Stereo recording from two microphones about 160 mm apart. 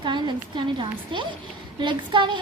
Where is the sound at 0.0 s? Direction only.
30° right (ahead or behind).